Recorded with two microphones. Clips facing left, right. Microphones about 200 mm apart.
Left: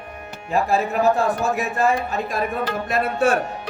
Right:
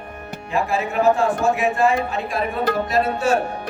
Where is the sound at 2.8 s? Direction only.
55° left (ahead or behind).